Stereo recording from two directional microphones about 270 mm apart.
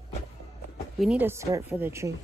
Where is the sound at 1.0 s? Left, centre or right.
Centre.